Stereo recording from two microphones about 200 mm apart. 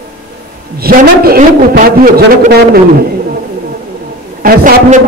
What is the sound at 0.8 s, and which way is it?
A man's voice, 50° right (ahead or behind).